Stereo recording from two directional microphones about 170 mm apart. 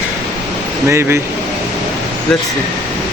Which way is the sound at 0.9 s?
15° right (ahead or behind).